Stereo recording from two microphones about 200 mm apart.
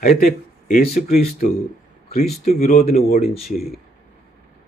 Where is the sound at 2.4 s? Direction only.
35° left (ahead or behind).